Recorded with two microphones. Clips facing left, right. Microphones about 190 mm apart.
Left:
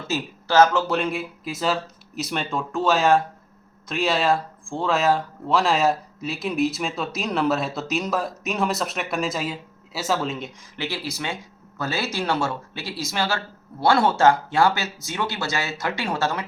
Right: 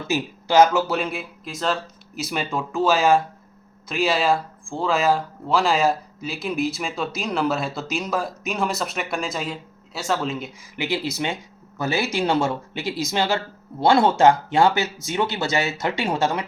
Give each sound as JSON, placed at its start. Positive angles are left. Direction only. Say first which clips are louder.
{"t": 0.1, "sound": "speech", "louder": "right 2 dB", "side_deg": -15}
{"t": 10.8, "sound": "speech", "louder": "right 5 dB", "side_deg": -20}